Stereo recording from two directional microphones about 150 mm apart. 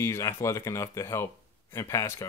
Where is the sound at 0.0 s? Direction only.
20° left (ahead or behind).